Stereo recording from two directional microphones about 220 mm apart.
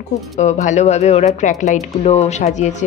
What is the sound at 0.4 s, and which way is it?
A woman's voice, 30° left (ahead or behind).